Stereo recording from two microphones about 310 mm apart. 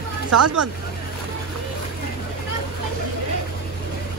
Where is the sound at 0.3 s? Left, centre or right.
Right.